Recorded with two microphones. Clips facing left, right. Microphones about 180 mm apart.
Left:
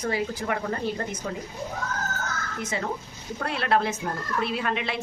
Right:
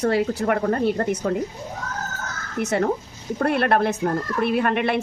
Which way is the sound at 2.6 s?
65° right (ahead or behind).